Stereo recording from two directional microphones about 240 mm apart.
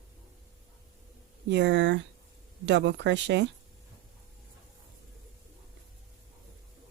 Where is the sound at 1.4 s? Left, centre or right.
Right.